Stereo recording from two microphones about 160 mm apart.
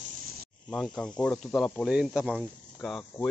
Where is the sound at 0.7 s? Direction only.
5° left (ahead or behind).